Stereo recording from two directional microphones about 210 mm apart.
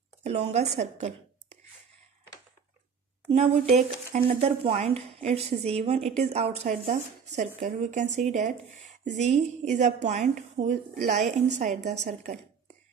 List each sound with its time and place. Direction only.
0.2 s speech: 30° right (ahead or behind)
3.3 s speech: 30° right (ahead or behind)